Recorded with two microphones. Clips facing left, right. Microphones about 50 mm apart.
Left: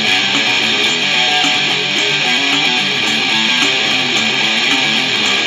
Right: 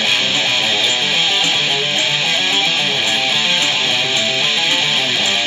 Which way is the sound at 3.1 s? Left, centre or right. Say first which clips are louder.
Left 2 dB; left.